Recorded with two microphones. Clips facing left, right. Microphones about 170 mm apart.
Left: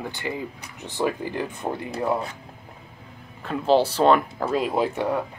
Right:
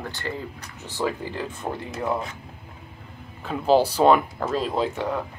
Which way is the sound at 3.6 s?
5° right (ahead or behind).